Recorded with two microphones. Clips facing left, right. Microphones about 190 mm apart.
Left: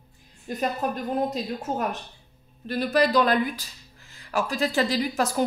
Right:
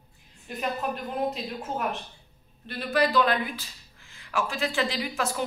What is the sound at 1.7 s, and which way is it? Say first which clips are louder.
A woman's voice: left 1 dB; 40° left (ahead or behind).